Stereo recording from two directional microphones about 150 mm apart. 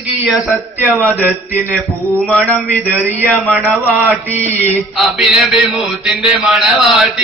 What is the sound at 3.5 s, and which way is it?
Speech, 10° right (ahead or behind).